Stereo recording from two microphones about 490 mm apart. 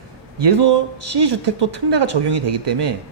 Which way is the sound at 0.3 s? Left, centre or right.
Right.